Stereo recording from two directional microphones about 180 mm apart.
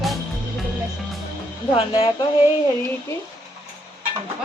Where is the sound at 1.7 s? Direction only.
25° left (ahead or behind).